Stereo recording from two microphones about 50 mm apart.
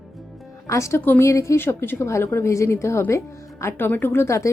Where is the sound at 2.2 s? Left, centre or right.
Left.